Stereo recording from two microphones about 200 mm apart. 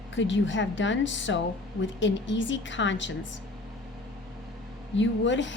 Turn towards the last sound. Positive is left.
turn(degrees=65)  # may be behind; listen again after turning